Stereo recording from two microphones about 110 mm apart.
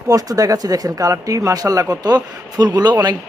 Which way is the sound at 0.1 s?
35° right (ahead or behind).